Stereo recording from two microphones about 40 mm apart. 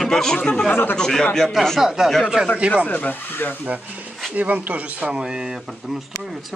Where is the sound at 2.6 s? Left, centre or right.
Right.